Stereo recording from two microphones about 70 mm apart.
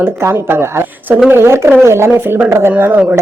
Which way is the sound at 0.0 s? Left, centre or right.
Right.